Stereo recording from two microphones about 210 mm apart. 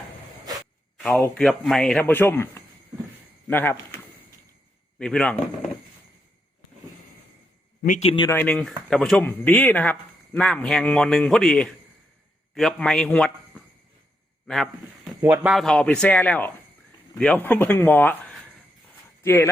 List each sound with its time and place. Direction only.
1.0 s a man's voice: 5° left (ahead or behind)
4.9 s speech: 5° left (ahead or behind)
7.9 s a man's voice: 35° left (ahead or behind)
8.1 s speech: 20° left (ahead or behind)
8.4 s speech: centre (ahead or behind)
14.4 s a man's voice: centre (ahead or behind)